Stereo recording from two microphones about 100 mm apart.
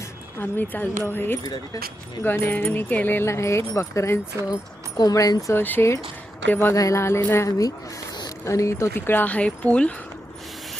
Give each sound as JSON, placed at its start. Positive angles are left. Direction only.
{"t": 0.3, "sound": "speech", "side_deg": 20}
{"t": 1.5, "sound": "speech", "side_deg": 40}
{"t": 2.2, "sound": "speech", "side_deg": 20}
{"t": 5.5, "sound": "speech", "side_deg": 20}
{"t": 6.7, "sound": "speech", "side_deg": 30}